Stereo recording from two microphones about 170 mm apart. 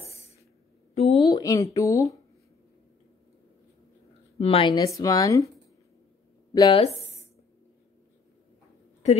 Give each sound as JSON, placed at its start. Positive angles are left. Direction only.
{"t": 0.0, "sound": "a sound", "side_deg": 35}
{"t": 1.3, "sound": "speech", "side_deg": 20}
{"t": 4.4, "sound": "speech", "side_deg": 35}
{"t": 4.7, "sound": "speech", "side_deg": 20}
{"t": 6.5, "sound": "speech", "side_deg": 30}